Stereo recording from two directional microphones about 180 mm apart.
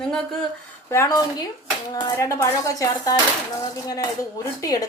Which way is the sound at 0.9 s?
20° left (ahead or behind).